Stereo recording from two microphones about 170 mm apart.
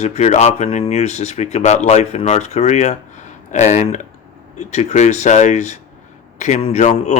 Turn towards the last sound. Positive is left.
turn(degrees=40)  # may be behind; listen again after turning